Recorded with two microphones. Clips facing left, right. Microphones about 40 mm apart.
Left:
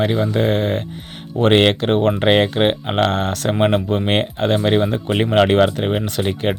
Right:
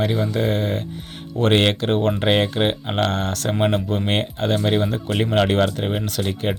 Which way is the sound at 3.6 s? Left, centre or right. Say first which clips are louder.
Left 4 dB; left.